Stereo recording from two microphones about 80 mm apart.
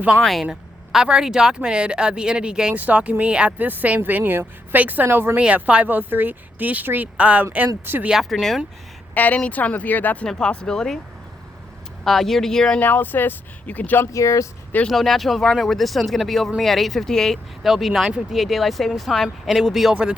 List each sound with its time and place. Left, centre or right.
0.2 s speech: centre; by 5.4 s right
5.4 s speech: centre
8.1 s speech: centre
9.1 s speech: left
10.2 s speech: centre
12.0 s speech: centre
12.8 s speech: left
14.1 s speech: left
14.8 s speech: centre